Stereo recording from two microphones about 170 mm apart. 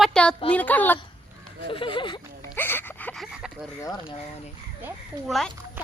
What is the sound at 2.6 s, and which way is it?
Gasp, 10° left (ahead or behind).